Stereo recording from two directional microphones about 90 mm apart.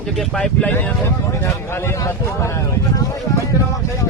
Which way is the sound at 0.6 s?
15° left (ahead or behind).